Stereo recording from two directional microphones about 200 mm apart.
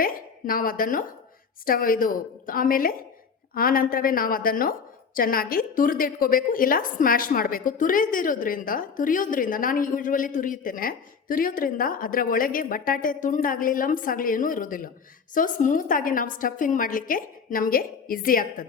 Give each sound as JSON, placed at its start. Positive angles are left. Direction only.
{"t": 0.0, "sound": "a woman's voice", "side_deg": 45}